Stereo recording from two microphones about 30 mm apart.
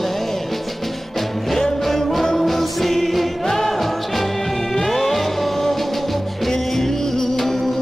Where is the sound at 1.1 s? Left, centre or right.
Centre.